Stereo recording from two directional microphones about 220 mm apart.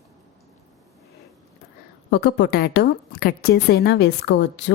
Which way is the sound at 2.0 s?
50° left (ahead or behind).